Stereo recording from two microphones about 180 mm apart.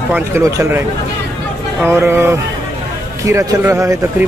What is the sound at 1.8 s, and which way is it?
Speech, 15° right (ahead or behind).